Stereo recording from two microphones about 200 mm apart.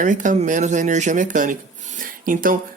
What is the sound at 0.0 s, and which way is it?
Speech, 40° right (ahead or behind).